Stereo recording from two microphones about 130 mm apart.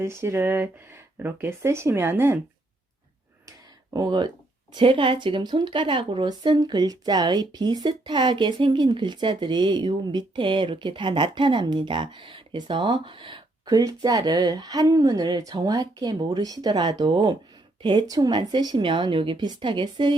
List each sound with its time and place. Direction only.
0.0 s speech: 20° right (ahead or behind)
3.9 s a woman's voice: 30° right (ahead or behind)